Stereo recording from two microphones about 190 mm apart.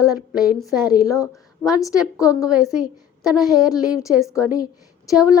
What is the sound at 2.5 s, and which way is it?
Speech, centre (ahead or behind).